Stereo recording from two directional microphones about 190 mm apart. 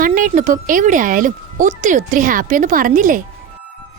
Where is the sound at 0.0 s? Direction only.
45° right (ahead or behind).